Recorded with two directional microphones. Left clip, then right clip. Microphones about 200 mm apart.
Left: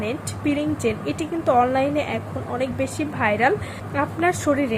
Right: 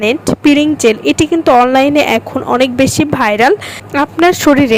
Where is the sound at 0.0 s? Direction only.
50° right (ahead or behind).